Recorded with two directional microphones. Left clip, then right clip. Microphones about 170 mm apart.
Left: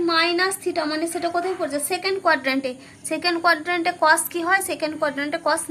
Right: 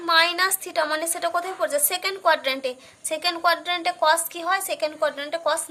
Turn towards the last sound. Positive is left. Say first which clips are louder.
# left 2 dB
turn(degrees=-20)  # may be behind; listen again after turning